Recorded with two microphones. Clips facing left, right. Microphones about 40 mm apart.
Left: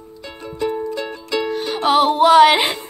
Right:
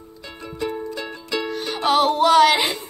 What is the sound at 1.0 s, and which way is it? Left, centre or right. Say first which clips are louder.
Music: left 4 dB; centre.